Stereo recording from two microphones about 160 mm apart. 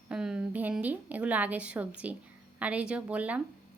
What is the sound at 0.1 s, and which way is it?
A woman's voice, 5° right (ahead or behind).